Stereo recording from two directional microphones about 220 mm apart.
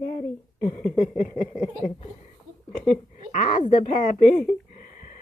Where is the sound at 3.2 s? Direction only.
35° left (ahead or behind).